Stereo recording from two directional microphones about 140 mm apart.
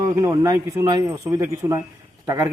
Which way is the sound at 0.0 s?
25° right (ahead or behind).